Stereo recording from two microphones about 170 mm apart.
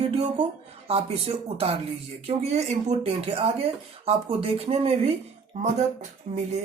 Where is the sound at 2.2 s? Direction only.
40° right (ahead or behind).